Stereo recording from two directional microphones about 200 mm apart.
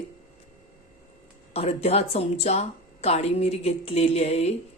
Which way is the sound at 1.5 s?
30° left (ahead or behind).